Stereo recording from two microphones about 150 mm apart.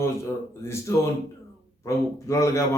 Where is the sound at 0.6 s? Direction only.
20° left (ahead or behind).